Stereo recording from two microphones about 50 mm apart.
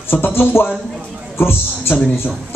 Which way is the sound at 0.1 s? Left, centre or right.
Left.